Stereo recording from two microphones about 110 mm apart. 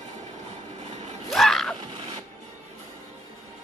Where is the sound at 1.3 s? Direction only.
Centre (ahead or behind).